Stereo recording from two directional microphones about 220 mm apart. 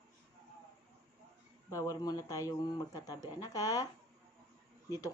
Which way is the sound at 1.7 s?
15° left (ahead or behind).